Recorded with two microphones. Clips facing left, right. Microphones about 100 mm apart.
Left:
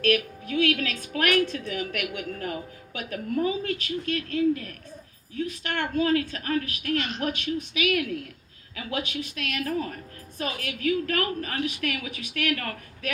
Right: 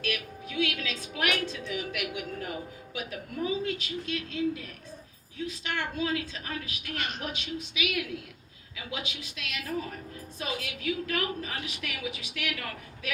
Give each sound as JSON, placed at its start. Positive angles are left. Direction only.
{"t": 0.0, "sound": "a woman's voice", "side_deg": 55}